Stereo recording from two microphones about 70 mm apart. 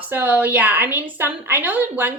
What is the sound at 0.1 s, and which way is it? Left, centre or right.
A woman's voice, right.